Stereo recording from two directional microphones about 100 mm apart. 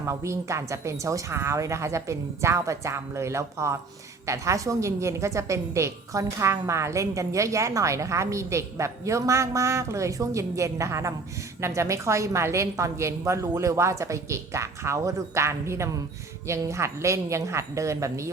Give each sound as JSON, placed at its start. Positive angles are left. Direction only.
{"t": 0.0, "sound": "a woman's voice", "side_deg": -30}